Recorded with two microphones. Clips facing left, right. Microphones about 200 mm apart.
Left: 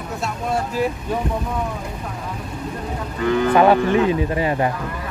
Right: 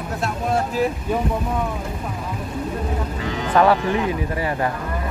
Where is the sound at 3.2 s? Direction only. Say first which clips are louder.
Left 12 dB; 55° left (ahead or behind).